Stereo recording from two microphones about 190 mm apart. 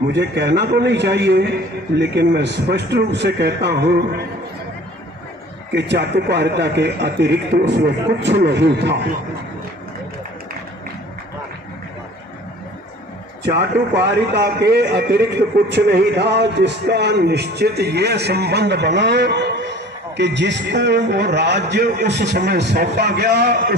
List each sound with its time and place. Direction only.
0.1 s a man's voice: 65° right (ahead or behind)
5.7 s a man's voice: 65° right (ahead or behind)
13.4 s a man's voice: 65° right (ahead or behind)